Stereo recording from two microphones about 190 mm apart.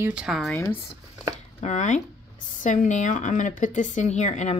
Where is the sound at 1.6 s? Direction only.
40° left (ahead or behind).